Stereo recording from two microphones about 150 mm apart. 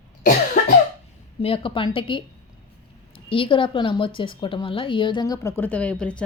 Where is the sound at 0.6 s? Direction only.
50° left (ahead or behind).